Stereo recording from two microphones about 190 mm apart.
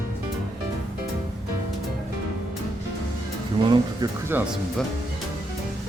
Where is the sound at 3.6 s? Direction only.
25° right (ahead or behind).